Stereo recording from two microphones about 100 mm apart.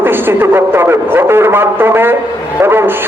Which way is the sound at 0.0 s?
20° right (ahead or behind).